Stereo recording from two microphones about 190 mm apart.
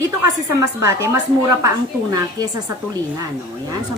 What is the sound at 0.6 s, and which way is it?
A woman's voice, 15° right (ahead or behind).